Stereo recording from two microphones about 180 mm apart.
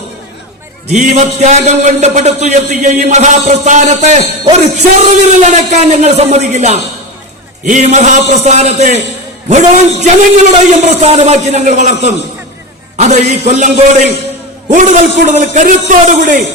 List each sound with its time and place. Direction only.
0.9 s a man's voice: 40° right (ahead or behind)